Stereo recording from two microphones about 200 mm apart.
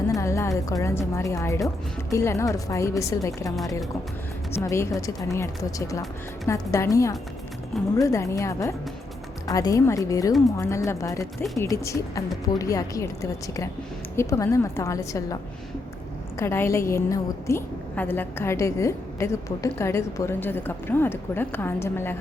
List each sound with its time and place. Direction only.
0.1 s a woman's voice: 15° left (ahead or behind)
6.5 s a woman's voice: 15° left (ahead or behind)
14.2 s a woman's voice: 15° left (ahead or behind)
16.4 s a woman's voice: 15° left (ahead or behind)